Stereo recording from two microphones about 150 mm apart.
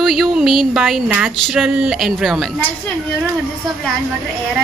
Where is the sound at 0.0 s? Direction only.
Centre (ahead or behind).